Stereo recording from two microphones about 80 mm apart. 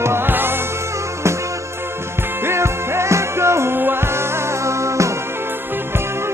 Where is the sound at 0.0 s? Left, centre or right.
Right.